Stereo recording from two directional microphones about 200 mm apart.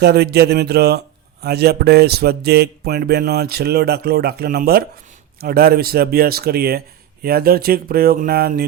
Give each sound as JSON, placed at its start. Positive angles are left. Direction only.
{"t": 0.0, "sound": "a man's voice", "side_deg": -55}